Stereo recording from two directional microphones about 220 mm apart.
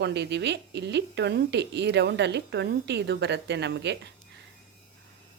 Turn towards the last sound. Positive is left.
turn(degrees=-50)  # may be behind; listen again after turning